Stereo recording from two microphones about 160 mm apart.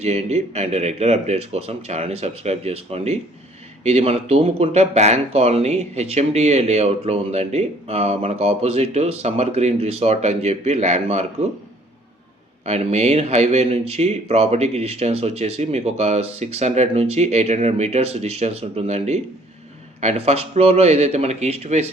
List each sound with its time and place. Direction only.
0.0 s speech: 40° right (ahead or behind)
12.6 s speech: 40° right (ahead or behind)